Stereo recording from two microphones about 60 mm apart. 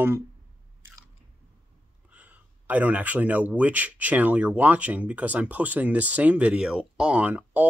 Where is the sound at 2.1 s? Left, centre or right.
Right.